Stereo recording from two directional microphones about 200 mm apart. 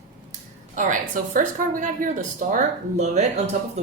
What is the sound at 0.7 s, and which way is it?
Speech, 40° right (ahead or behind).